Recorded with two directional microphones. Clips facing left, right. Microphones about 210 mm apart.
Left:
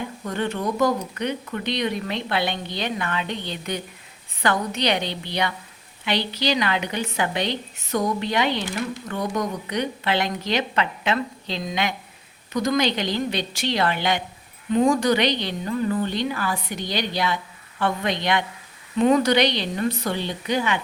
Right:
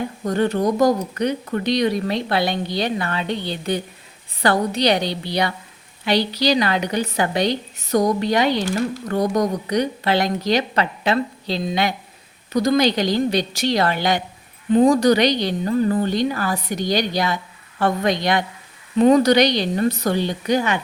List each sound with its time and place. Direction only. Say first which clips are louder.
0.3 s a woman's voice: right 7 dB; 40° right (ahead or behind)